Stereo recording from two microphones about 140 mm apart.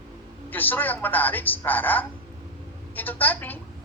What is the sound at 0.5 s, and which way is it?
A man's voice, 15° left (ahead or behind).